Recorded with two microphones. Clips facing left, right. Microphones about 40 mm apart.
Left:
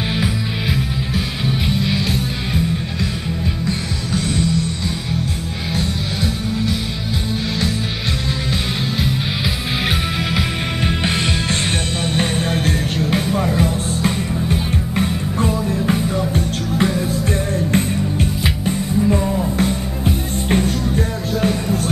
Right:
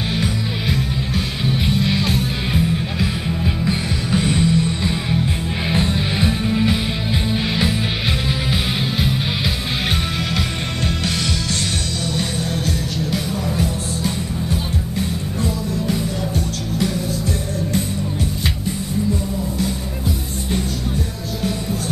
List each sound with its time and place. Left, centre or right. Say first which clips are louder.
0.2 s music: left 1 dB; centre
3.6 s music: right 1 dB; centre
12.2 s music: left 6 dB; left
19.6 s music: left 4 dB; left